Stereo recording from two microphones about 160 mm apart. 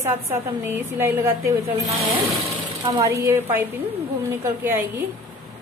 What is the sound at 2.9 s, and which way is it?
A woman's voice, 20° right (ahead or behind).